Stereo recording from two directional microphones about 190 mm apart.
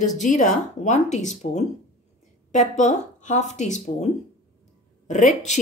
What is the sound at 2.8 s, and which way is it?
Speech, 40° left (ahead or behind).